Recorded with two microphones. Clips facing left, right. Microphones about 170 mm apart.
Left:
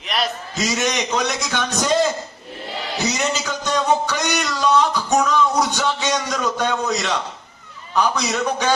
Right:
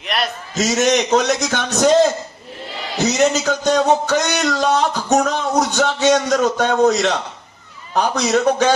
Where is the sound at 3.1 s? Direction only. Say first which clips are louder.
Right 7 dB; 45° right (ahead or behind).